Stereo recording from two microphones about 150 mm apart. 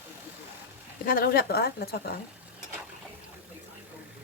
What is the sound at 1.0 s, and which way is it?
Speech, 75° left (ahead or behind).